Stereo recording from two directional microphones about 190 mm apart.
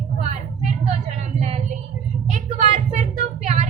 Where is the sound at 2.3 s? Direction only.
40° right (ahead or behind).